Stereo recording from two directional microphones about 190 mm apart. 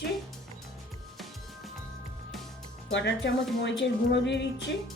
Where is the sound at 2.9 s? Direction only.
70° left (ahead or behind).